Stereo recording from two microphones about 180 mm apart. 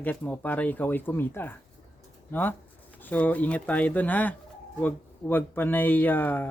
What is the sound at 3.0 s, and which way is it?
Speech, 10° left (ahead or behind).